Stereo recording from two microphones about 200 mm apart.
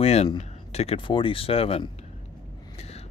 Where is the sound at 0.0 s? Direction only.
30° left (ahead or behind).